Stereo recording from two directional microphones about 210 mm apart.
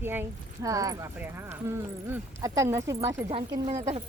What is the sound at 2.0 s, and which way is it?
Speech, 15° right (ahead or behind).